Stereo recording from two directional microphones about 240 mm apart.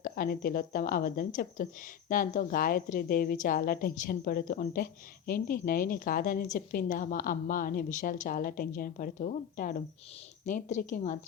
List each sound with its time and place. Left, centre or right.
0.0 s a woman's voice: left